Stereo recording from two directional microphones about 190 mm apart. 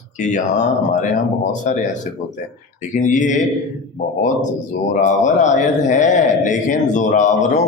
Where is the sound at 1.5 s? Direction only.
40° left (ahead or behind).